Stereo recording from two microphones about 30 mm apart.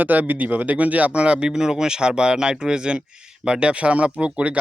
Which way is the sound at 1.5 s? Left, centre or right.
Right.